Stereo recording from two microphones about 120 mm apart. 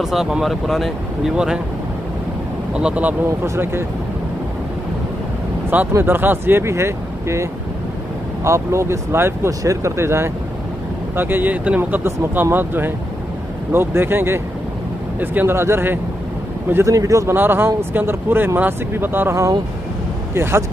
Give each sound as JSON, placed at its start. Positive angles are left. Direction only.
{"t": 0.0, "sound": "speech", "side_deg": -5}
{"t": 2.7, "sound": "speech", "side_deg": -10}
{"t": 5.7, "sound": "speech", "side_deg": -15}
{"t": 8.5, "sound": "speech", "side_deg": -25}